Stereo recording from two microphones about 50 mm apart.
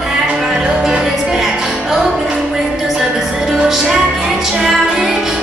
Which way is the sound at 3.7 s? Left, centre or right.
Centre.